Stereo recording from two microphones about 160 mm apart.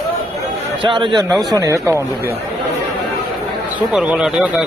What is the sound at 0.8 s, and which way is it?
Speech, 30° right (ahead or behind).